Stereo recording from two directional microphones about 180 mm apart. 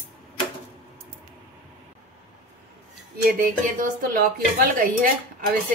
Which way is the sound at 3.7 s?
55° right (ahead or behind).